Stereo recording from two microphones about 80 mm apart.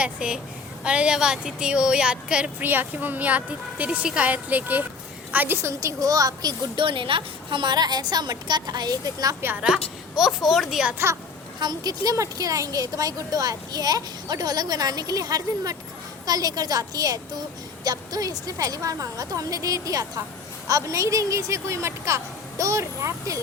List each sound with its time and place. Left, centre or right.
0.0 s a woman's voice: centre
5.8 s a woman's voice: right
6.7 s a woman's voice: right
9.6 s a woman's voice: centre
10.9 s a woman's voice: right
11.6 s a woman's voice: right